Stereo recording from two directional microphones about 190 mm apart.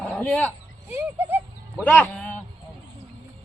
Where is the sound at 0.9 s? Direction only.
10° right (ahead or behind).